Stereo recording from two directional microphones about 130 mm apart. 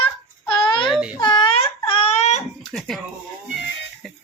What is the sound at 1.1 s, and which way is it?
Babbling, 35° left (ahead or behind).